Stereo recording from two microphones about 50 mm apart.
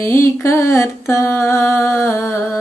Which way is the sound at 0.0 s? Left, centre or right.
Left.